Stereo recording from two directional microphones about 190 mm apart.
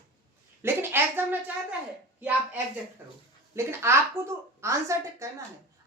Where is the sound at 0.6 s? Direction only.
10° right (ahead or behind).